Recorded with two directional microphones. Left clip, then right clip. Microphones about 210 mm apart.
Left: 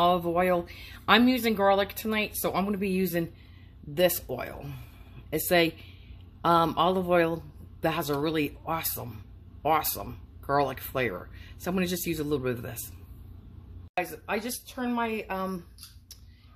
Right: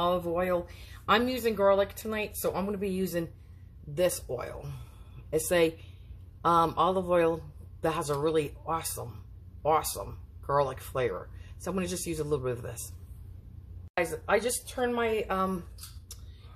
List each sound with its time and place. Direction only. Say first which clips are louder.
0.0 s speech: left 4 dB; 45° left (ahead or behind)
13.9 s speech: right 3 dB; 35° left (ahead or behind)